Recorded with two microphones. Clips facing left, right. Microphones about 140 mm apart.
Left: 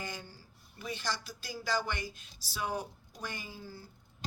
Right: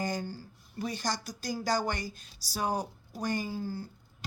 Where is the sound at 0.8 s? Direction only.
40° right (ahead or behind).